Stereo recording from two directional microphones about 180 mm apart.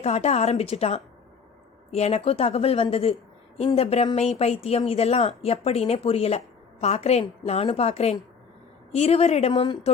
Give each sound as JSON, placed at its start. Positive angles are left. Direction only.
{"t": 0.0, "sound": "speech", "side_deg": 35}